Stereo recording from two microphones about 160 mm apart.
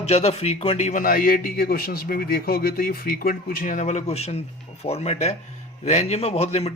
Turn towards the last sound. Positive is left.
turn(degrees=40)  # may be behind; listen again after turning